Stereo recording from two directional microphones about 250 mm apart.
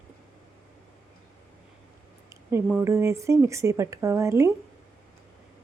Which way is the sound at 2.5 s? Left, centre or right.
Centre.